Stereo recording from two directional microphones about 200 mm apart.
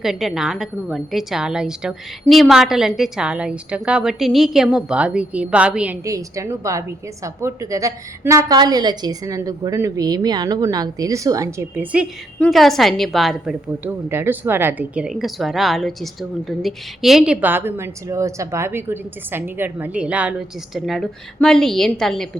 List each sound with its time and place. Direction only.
0.0 s a woman's voice: centre (ahead or behind)